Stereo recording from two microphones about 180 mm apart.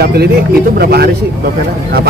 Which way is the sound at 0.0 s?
60° right (ahead or behind).